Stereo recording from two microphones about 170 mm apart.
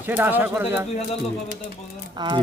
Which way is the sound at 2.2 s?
25° right (ahead or behind).